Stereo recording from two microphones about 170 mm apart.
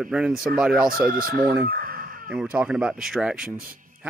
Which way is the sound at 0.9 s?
55° right (ahead or behind).